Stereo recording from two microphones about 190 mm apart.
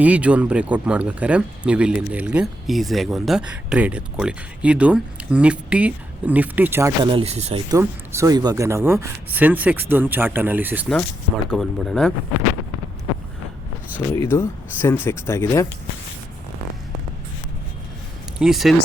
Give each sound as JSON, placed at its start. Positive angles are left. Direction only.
{"t": 0.0, "sound": "speech", "side_deg": -5}
{"t": 7.0, "sound": "speech", "side_deg": -30}
{"t": 7.7, "sound": "speech", "side_deg": -15}
{"t": 11.5, "sound": "speech", "side_deg": 0}
{"t": 14.1, "sound": "speech", "side_deg": 15}
{"t": 18.3, "sound": "speech", "side_deg": 0}